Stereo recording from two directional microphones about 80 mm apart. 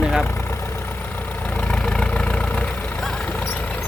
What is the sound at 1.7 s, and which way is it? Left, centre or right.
Vehicle, centre.